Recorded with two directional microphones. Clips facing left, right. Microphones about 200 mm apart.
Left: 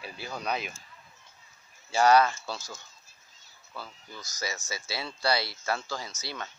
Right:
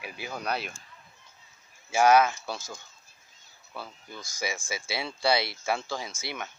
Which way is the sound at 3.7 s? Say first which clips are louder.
Right 2 dB; 20° right (ahead or behind).